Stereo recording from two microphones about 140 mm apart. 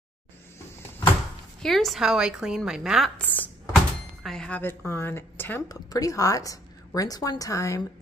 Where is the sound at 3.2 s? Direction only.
10° left (ahead or behind).